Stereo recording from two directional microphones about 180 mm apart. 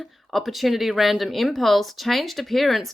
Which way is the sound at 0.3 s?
Centre (ahead or behind).